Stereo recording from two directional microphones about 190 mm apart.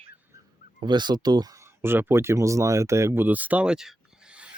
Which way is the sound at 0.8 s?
25° right (ahead or behind).